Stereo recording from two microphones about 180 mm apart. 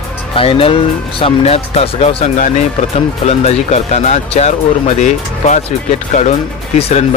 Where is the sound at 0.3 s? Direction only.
30° left (ahead or behind).